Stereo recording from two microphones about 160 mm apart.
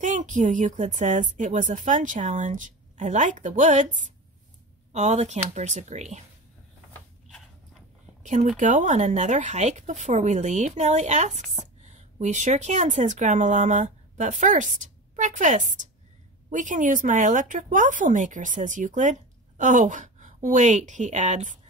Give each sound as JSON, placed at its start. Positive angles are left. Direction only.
{"t": 0.0, "sound": "speech", "side_deg": -50}
{"t": 8.2, "sound": "speech", "side_deg": -50}